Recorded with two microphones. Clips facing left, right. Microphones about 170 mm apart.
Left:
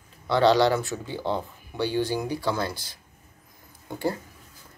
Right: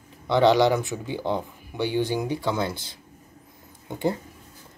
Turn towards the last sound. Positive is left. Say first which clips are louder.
# right 2 dB
turn(degrees=-20)  # may be behind; listen again after turning